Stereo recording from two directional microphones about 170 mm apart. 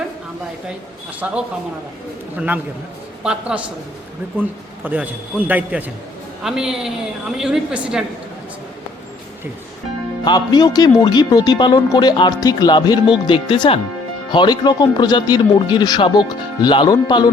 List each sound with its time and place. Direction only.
1.2 s a woman's voice: 5° right (ahead or behind)
4.9 s a man's voice: 10° right (ahead or behind)
10.2 s speech: 25° left (ahead or behind)